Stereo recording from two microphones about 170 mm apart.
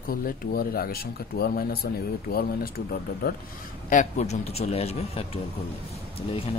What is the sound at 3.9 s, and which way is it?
Speech, 45° left (ahead or behind).